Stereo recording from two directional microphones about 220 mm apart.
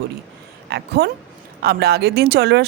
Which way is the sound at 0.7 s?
50° right (ahead or behind).